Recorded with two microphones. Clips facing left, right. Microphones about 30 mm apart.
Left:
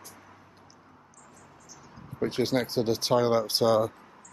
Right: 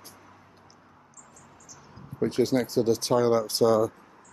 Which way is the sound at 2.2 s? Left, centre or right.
Left.